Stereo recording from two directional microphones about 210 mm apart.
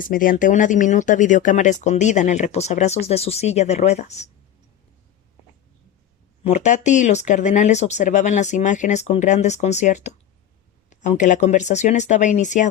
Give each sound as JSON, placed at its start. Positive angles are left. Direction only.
{"t": 0.0, "sound": "speech", "side_deg": 40}
{"t": 6.4, "sound": "speech", "side_deg": 35}